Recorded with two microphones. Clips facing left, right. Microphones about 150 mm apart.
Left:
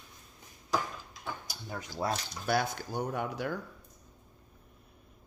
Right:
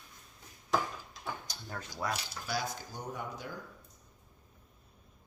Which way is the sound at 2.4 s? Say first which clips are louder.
Left 7 dB; 60° left (ahead or behind).